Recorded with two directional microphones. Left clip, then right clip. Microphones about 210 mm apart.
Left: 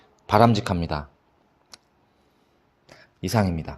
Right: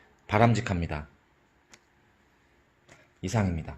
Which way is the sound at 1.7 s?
40° left (ahead or behind).